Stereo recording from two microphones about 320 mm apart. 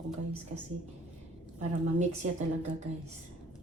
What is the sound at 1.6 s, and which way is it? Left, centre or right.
Speech, right.